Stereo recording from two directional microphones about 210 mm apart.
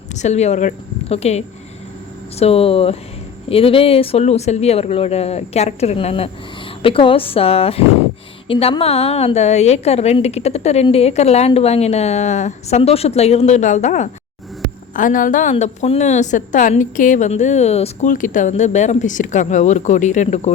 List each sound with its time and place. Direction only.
0.1 s a woman's voice: 35° left (ahead or behind)